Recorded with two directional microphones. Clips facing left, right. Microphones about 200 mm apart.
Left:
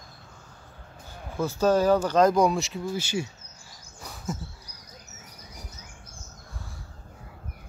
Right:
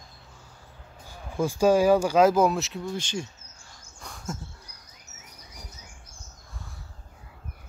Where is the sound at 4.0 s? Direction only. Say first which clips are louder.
Left 2 dB; 5° left (ahead or behind).